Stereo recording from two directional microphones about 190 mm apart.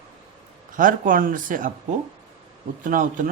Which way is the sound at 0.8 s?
45° right (ahead or behind).